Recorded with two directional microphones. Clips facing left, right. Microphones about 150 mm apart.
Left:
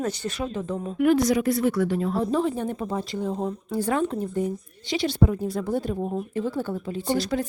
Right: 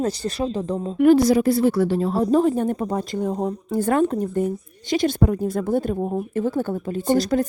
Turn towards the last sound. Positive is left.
turn(degrees=-45)  # may be behind; listen again after turning